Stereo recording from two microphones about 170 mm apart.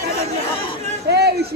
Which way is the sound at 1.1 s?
75° right (ahead or behind).